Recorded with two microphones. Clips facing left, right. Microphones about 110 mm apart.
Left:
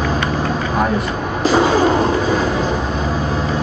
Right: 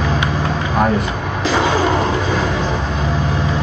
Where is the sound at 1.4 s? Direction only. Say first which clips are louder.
Left 3 dB; 40° left (ahead or behind).